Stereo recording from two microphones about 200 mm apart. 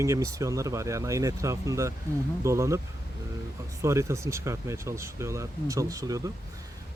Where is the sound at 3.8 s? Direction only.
15° right (ahead or behind).